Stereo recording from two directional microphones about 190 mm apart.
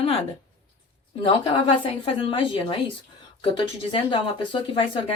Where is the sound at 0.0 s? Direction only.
30° left (ahead or behind).